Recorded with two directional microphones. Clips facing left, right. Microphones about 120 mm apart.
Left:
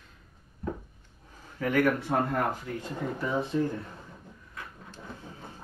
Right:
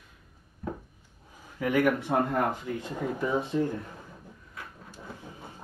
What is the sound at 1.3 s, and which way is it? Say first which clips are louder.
Speech: right 1 dB; 15° right (ahead or behind).